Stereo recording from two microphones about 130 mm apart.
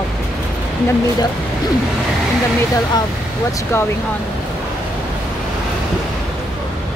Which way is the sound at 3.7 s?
20° left (ahead or behind).